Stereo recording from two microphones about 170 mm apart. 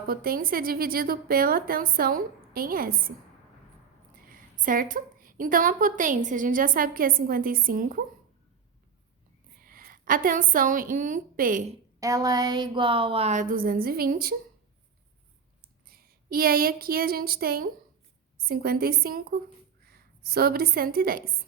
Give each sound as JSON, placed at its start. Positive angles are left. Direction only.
{"t": 0.1, "sound": "a woman's voice", "side_deg": -60}
{"t": 4.3, "sound": "a woman's voice", "side_deg": -55}
{"t": 9.6, "sound": "a woman's voice", "side_deg": -55}
{"t": 11.9, "sound": "speech", "side_deg": -20}
{"t": 15.9, "sound": "a woman's voice", "side_deg": -60}